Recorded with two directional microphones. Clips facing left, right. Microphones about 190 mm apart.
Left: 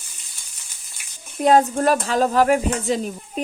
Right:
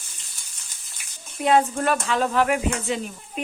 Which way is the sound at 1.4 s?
40° left (ahead or behind).